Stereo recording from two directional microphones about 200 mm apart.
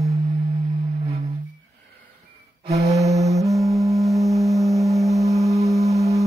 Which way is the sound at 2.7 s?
30° right (ahead or behind).